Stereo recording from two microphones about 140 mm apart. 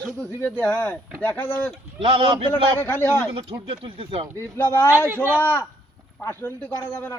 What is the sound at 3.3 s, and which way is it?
Speech, 40° right (ahead or behind).